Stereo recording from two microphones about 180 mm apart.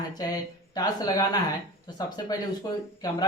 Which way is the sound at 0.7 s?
20° left (ahead or behind).